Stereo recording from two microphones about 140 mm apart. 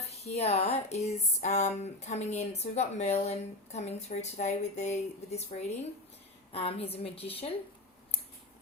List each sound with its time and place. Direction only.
0.1 s speech: 50° left (ahead or behind)